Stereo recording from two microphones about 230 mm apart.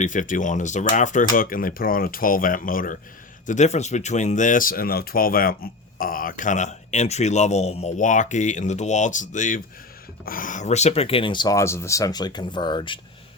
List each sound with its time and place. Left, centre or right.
0.0 s a man's voice: left